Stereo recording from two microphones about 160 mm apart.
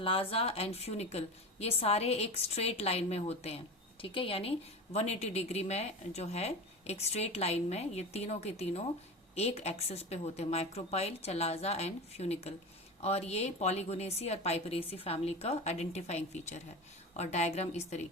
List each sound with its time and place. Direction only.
0.0 s a woman's voice: 35° left (ahead or behind)